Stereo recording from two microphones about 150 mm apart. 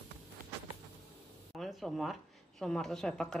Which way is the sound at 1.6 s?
Centre (ahead or behind).